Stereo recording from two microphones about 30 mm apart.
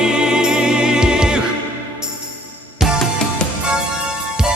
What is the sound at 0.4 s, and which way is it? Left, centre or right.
Music, right.